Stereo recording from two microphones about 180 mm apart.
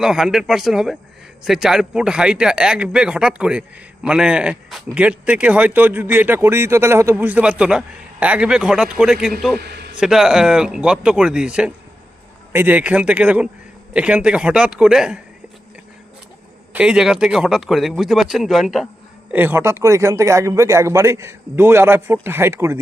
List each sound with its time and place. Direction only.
0.0 s a man's voice: 5° right (ahead or behind)
9.6 s a man's voice: 65° right (ahead or behind)
9.9 s a man's voice: 5° right (ahead or behind)
16.7 s a man's voice: 5° right (ahead or behind)